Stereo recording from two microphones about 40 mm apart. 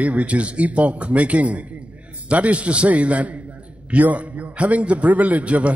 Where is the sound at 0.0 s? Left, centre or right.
Right.